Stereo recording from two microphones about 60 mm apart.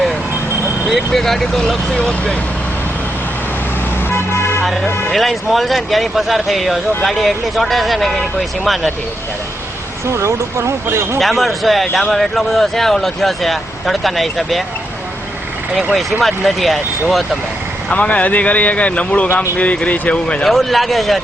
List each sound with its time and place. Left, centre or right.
0.9 s speech: centre
4.1 s vehicle: left
5.1 s speech: centre
10.1 s speech: right
11.2 s speech: centre
16.2 s speech: centre
17.9 s speech: left
20.4 s speech: centre